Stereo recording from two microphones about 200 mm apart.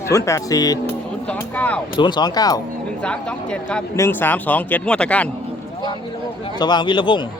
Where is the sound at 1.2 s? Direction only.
5° left (ahead or behind).